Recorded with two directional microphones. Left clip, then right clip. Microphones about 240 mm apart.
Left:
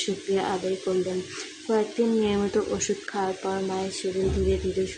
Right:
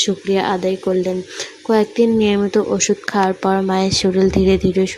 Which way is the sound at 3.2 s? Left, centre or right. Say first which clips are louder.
Right 12 dB; right.